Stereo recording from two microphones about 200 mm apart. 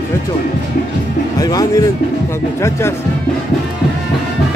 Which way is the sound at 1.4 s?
20° left (ahead or behind).